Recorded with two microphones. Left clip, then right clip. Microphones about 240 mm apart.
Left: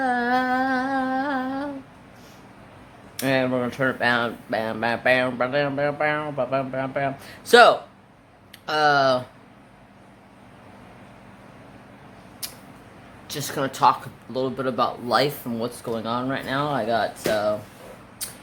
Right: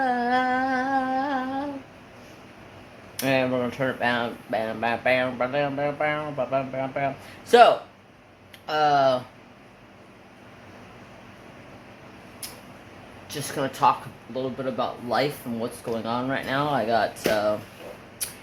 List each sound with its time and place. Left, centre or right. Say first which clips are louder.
0.0 s humming: left 1 dB; centre
3.2 s speech: left 1 dB; centre
13.2 s speech: left 2 dB; centre